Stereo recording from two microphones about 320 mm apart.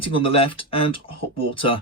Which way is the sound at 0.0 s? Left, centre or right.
Centre.